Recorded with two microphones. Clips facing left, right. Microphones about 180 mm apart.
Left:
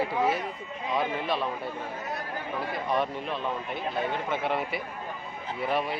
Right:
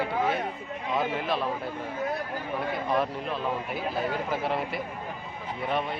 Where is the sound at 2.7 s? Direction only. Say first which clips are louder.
Even; centre (ahead or behind).